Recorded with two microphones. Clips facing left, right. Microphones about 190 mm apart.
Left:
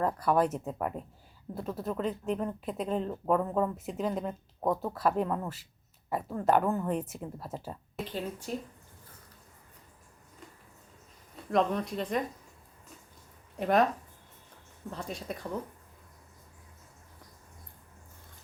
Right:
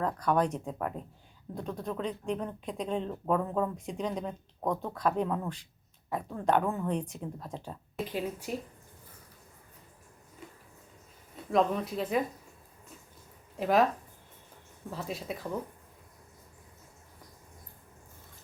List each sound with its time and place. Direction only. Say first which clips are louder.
0.0 s speech: left 1 dB; 5° left (ahead or behind)
8.0 s speech: right 2 dB; 10° right (ahead or behind)
11.4 s speech: right 1 dB; 5° right (ahead or behind)
13.6 s speech: even; centre (ahead or behind)
14.8 s speech: right 1 dB; 5° right (ahead or behind)